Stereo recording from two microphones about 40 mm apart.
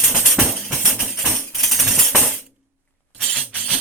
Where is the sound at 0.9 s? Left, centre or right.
Centre.